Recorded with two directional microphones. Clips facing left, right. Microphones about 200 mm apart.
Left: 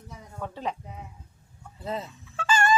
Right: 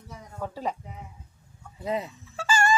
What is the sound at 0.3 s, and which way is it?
Speech, 5° right (ahead or behind).